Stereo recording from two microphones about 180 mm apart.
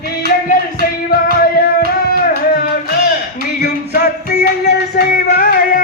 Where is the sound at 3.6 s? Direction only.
60° left (ahead or behind).